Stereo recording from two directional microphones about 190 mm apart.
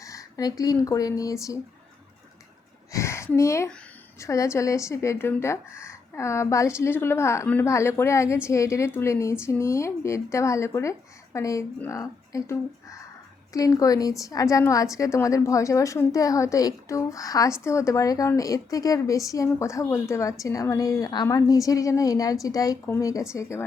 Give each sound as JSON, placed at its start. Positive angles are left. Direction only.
{"t": 0.0, "sound": "speech", "side_deg": 15}
{"t": 2.9, "sound": "a sound", "side_deg": 15}
{"t": 4.2, "sound": "a woman's voice", "side_deg": 15}